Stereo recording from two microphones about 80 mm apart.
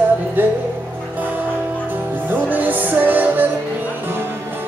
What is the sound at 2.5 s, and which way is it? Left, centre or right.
Music, right.